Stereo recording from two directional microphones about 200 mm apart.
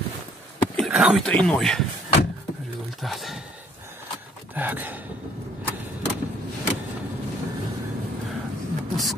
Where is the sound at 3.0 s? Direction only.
Centre (ahead or behind).